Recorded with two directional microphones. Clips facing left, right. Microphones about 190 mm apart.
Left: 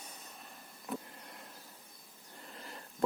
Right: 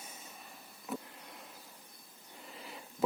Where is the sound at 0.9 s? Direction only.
Centre (ahead or behind).